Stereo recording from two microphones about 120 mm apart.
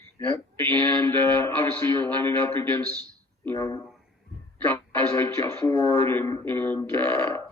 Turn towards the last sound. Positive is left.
turn(degrees=20)  # may be behind; listen again after turning